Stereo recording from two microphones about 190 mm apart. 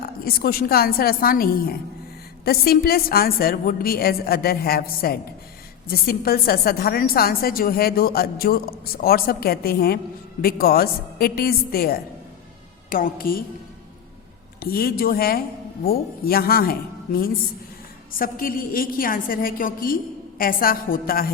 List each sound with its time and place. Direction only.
0.0 s a woman's voice: 50° left (ahead or behind)
14.6 s a woman's voice: 55° left (ahead or behind)